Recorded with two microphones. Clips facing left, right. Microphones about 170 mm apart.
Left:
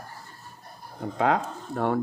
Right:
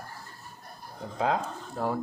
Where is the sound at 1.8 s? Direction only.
65° left (ahead or behind).